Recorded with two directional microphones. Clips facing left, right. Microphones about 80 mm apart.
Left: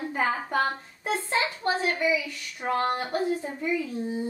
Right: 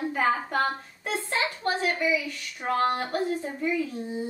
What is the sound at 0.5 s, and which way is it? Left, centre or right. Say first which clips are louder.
A woman's voice: even; centre.